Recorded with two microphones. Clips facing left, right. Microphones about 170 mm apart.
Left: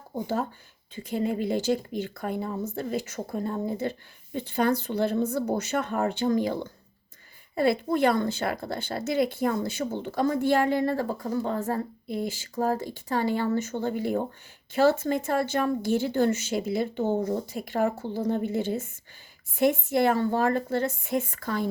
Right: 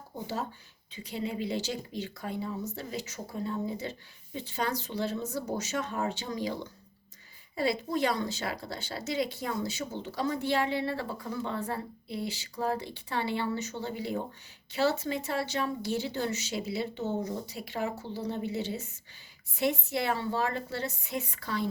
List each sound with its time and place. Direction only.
0.9 s a woman's voice: 50° left (ahead or behind)